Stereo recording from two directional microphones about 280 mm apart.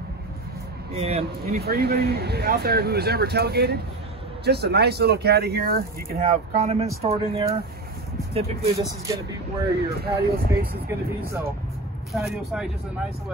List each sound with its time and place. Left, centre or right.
0.9 s speech: right
1.4 s speech: right; by 9.2 s centre
9.8 s speech: right
12.1 s speech: centre